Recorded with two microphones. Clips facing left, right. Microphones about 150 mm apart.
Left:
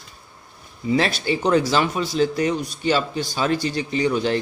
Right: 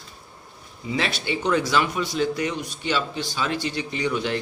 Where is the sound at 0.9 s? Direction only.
40° left (ahead or behind).